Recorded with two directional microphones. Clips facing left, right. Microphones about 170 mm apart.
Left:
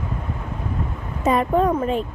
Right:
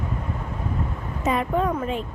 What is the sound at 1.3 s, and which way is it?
Speech, 40° left (ahead or behind).